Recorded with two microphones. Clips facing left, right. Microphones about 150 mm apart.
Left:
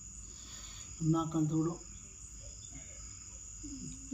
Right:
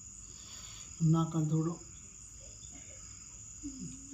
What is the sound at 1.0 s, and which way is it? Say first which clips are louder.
Cricket: even; centre (ahead or behind).